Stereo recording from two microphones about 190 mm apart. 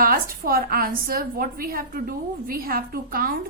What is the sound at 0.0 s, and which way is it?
A woman's voice, 50° right (ahead or behind).